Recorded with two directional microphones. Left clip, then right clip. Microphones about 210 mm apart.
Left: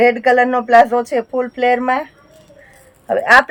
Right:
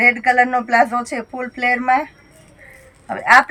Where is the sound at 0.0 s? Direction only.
20° left (ahead or behind).